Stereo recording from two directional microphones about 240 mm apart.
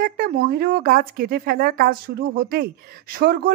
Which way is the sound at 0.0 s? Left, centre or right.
Right.